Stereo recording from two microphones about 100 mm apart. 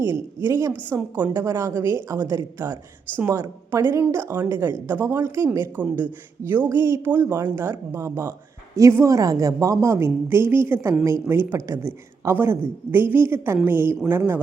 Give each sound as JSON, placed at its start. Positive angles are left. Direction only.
{"t": 0.0, "sound": "a woman's voice", "side_deg": -30}
{"t": 5.7, "sound": "a man's voice", "side_deg": -15}